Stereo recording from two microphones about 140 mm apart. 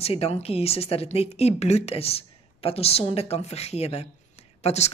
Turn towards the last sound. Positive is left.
turn(degrees=50)  # may be behind; listen again after turning